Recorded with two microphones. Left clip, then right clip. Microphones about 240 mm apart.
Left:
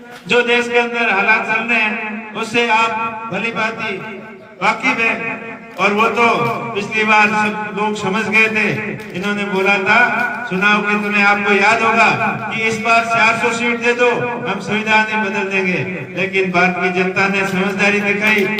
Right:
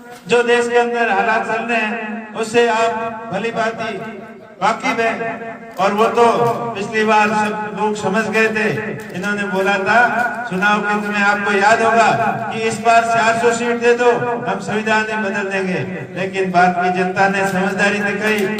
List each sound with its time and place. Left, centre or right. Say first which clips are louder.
0.3 s a man's voice: even; right